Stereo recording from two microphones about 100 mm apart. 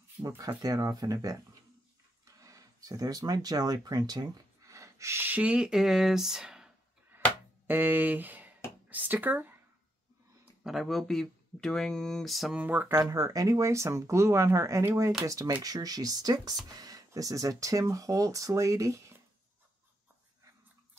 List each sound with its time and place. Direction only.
0.5 s speech: 40° right (ahead or behind); by 6.7 s 5° right (ahead or behind)
7.6 s speech: 20° right (ahead or behind)
10.6 s speech: centre (ahead or behind)
12.5 s speech: 20° right (ahead or behind)
13.1 s speech: 35° right (ahead or behind)